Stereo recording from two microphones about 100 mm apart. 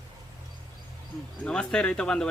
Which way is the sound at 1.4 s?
10° left (ahead or behind).